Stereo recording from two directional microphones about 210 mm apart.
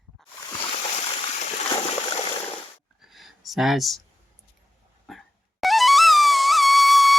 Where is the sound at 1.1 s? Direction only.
30° left (ahead or behind).